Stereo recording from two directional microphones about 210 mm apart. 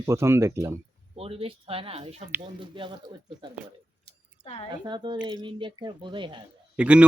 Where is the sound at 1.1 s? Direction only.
25° right (ahead or behind).